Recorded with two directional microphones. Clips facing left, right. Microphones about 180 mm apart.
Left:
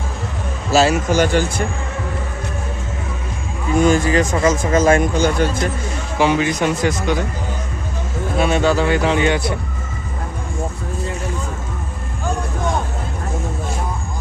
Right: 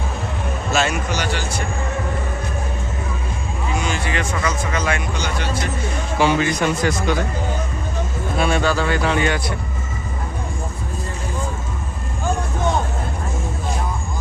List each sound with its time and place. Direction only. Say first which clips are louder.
0.7 s a man's voice: left 6 dB; 35° left (ahead or behind)
1.1 s a man's voice: left 8 dB; 50° left (ahead or behind)
3.8 s a man's voice: left 11 dB; 45° left (ahead or behind)
6.1 s speech: left 2 dB; 15° left (ahead or behind)
8.4 s a man's voice: left 3 dB; 20° left (ahead or behind)